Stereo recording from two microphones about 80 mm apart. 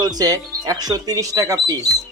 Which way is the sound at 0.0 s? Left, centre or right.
Right.